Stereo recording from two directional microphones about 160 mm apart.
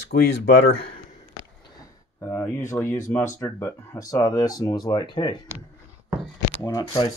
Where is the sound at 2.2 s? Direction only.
15° left (ahead or behind).